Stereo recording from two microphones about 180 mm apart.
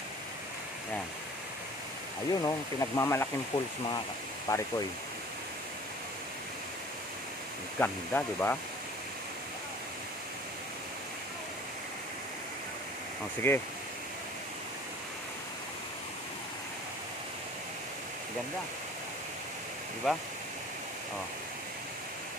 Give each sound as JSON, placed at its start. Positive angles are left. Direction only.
{"t": 2.4, "sound": "speech", "side_deg": 20}
{"t": 3.5, "sound": "speech", "side_deg": 25}
{"t": 7.8, "sound": "speech", "side_deg": 10}
{"t": 13.5, "sound": "speech", "side_deg": 15}
{"t": 20.1, "sound": "speech", "side_deg": 0}